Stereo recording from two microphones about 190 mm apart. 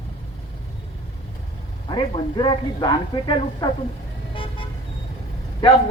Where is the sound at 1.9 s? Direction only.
25° left (ahead or behind).